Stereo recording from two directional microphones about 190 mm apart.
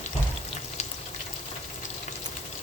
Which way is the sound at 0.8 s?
35° left (ahead or behind).